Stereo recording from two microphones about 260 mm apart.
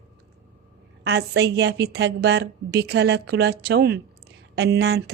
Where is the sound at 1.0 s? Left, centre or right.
Right.